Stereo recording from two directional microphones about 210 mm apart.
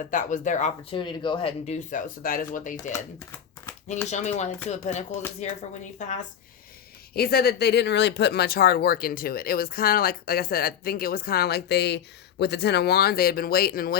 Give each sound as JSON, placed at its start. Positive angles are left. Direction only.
{"t": 0.1, "sound": "speech", "side_deg": 35}
{"t": 4.1, "sound": "speech", "side_deg": 35}
{"t": 7.1, "sound": "speech", "side_deg": 45}